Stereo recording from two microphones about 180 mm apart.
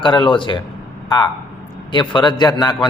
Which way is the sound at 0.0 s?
25° left (ahead or behind).